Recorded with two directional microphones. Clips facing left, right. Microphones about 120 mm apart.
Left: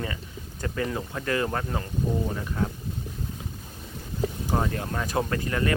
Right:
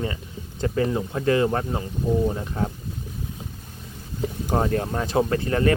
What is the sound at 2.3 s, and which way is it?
Speech, 30° right (ahead or behind).